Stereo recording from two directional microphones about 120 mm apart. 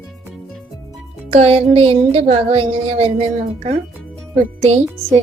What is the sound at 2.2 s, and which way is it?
A woman's voice, 60° right (ahead or behind).